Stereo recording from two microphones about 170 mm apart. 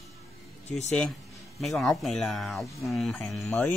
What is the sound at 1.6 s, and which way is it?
Speech, centre (ahead or behind).